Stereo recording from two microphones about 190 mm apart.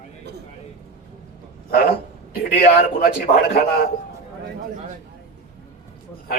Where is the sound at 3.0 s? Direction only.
55° left (ahead or behind).